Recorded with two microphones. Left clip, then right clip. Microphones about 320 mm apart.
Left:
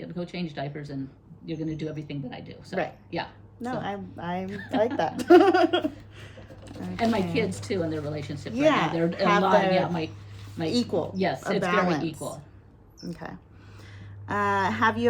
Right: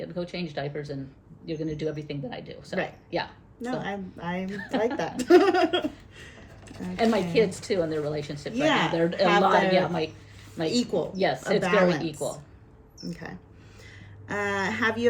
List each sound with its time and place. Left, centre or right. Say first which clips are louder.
0.0 s speech: right 2 dB; centre
3.6 s a woman's voice: even; centre
4.4 s speech: even; centre
4.9 s speech: left 2 dB; centre
7.0 s speech: right 3 dB; centre
8.6 s a woman's voice: left 2 dB; centre
9.0 s speech: right 1 dB; centre
10.7 s a woman's voice: even; centre
11.2 s speech: right 5 dB; centre
11.6 s a woman's voice: right 2 dB; centre
13.1 s a woman's voice: left 1 dB; centre